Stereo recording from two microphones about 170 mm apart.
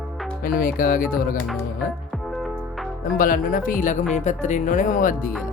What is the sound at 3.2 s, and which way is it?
Speech, 55° left (ahead or behind).